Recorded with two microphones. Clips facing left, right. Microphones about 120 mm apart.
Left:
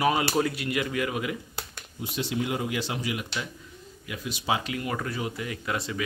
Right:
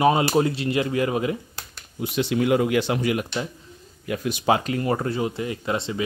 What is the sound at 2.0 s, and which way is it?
Speech, 70° right (ahead or behind).